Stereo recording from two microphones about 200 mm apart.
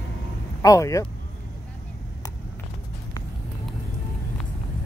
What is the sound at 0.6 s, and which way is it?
Speech, 15° left (ahead or behind).